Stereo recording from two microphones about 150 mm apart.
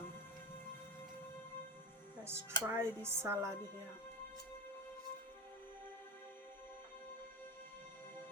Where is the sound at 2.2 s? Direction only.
15° right (ahead or behind).